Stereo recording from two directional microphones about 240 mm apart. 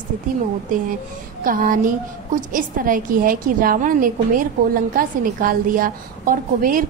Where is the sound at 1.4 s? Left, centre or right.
Right.